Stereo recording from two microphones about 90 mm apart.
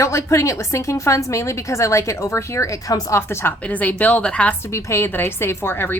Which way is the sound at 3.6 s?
15° left (ahead or behind).